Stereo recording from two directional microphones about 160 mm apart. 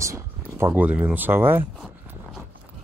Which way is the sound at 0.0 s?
15° right (ahead or behind).